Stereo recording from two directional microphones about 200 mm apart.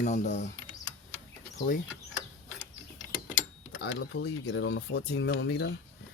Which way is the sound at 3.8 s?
60° left (ahead or behind).